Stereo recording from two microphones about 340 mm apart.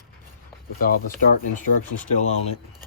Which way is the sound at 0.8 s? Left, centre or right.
Left.